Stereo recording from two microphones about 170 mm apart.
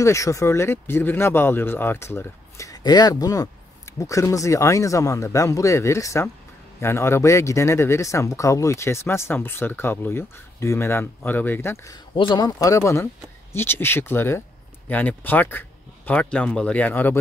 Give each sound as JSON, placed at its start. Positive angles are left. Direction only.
{"t": 0.0, "sound": "speech", "side_deg": 20}
{"t": 12.1, "sound": "speech", "side_deg": 30}